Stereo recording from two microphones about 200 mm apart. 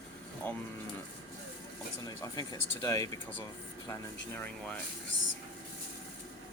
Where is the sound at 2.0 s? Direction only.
20° left (ahead or behind).